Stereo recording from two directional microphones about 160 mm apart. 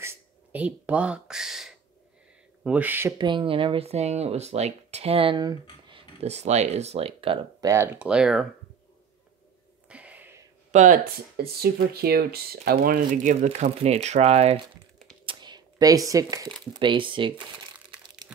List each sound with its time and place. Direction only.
0.0 s a sound: 10° right (ahead or behind)
2.6 s speech: 10° right (ahead or behind)
3.2 s speech: 30° right (ahead or behind)
6.2 s speech: 45° right (ahead or behind)
7.6 s speech: 20° right (ahead or behind)
8.0 s speech: 5° right (ahead or behind)
9.8 s a sound: 10° right (ahead or behind)
10.7 s speech: 50° right (ahead or behind)
11.3 s speech: 75° right (ahead or behind); by 14.6 s 40° right (ahead or behind)
15.2 s a sound: 25° right (ahead or behind)
16.7 s speech: 30° right (ahead or behind)